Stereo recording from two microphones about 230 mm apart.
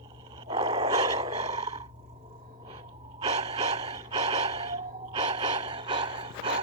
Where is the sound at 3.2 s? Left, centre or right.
Right.